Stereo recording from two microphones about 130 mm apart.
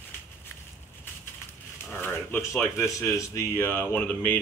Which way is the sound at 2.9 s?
25° left (ahead or behind).